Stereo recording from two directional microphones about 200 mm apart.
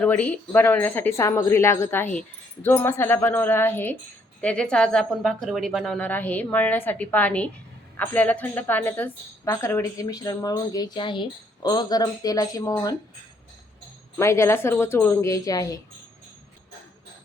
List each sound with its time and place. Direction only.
0.0 s a woman's voice: 5° left (ahead or behind)
14.2 s a woman's voice: 15° left (ahead or behind)